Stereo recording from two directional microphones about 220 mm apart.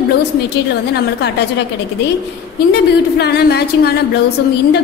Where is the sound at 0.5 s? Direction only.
50° left (ahead or behind).